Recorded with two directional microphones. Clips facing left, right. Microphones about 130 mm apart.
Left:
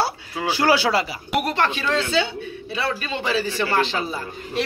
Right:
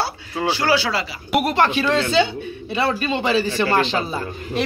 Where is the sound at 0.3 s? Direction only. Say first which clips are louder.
Right 1 dB; 5° left (ahead or behind).